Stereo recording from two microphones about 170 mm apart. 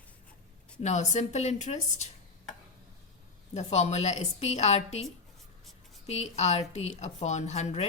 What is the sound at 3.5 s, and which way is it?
A woman's voice, 40° left (ahead or behind).